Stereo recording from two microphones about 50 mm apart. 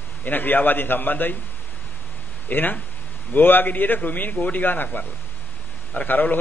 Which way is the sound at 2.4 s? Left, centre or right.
Left.